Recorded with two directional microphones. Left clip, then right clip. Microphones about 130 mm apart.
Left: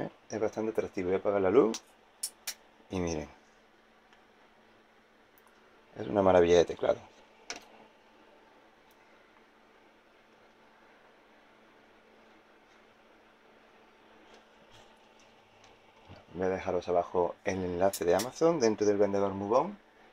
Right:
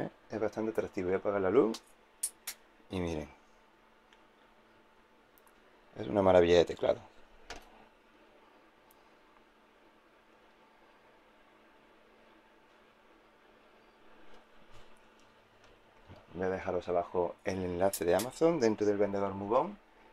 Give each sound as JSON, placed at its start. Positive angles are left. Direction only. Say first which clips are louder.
{"t": 0.3, "sound": "speech", "louder": "left 2 dB", "side_deg": 0}
{"t": 2.9, "sound": "speech", "louder": "left 3 dB", "side_deg": -5}
{"t": 5.9, "sound": "speech", "louder": "left 1 dB", "side_deg": -5}
{"t": 16.1, "sound": "speech", "louder": "left 3 dB", "side_deg": 5}
{"t": 17.7, "sound": "speech", "louder": "left 2 dB", "side_deg": -15}
{"t": 19.0, "sound": "speech", "louder": "left 4 dB", "side_deg": 20}